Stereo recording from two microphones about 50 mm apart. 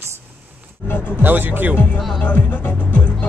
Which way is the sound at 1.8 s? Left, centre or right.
Left.